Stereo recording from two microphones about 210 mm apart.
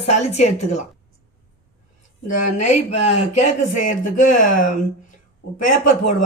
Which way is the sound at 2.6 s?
35° left (ahead or behind).